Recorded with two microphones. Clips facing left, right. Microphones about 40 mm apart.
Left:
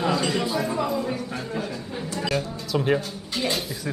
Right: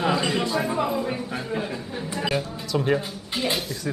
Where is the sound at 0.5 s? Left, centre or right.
Centre.